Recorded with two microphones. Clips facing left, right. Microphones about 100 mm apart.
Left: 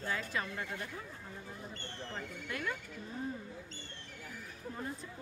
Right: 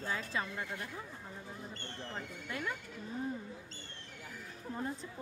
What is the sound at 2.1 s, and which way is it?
Speech, 15° right (ahead or behind).